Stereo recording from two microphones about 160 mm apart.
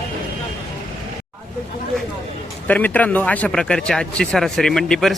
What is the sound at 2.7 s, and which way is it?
Speech, 10° left (ahead or behind).